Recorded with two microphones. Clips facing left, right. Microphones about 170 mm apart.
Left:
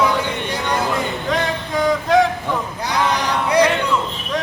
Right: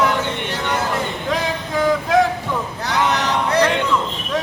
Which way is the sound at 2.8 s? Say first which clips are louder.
Right 1 dB; 10° left (ahead or behind).